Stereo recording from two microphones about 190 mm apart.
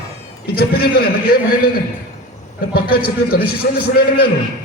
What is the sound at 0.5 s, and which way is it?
A man's voice, 55° left (ahead or behind).